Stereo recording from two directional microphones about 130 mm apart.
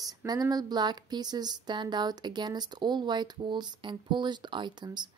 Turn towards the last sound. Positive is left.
turn(degrees=-35)  # may be behind; listen again after turning